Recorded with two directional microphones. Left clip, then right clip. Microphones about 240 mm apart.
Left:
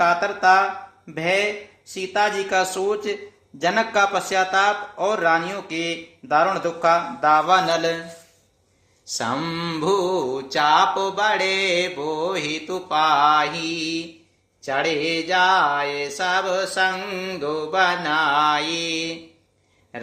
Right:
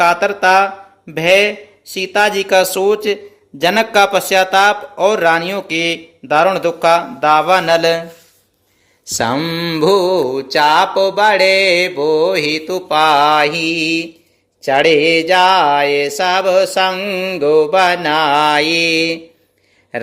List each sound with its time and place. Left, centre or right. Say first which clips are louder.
0.0 s mantra: right 6 dB; right
9.1 s mantra: right 8 dB; right